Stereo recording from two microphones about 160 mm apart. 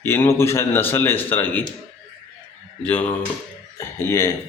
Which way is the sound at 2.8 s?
10° left (ahead or behind).